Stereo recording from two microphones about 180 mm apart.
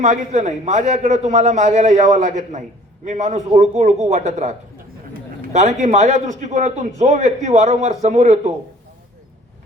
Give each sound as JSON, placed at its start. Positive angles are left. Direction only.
{"t": 0.0, "sound": "a man's voice", "side_deg": -40}
{"t": 5.5, "sound": "a man's voice", "side_deg": -40}